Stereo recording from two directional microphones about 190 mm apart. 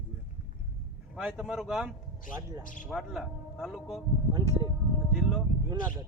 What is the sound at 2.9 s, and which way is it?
Speech, centre (ahead or behind).